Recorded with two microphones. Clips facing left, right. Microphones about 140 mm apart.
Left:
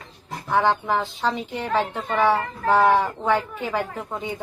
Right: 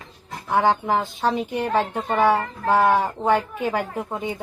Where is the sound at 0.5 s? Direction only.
10° right (ahead or behind).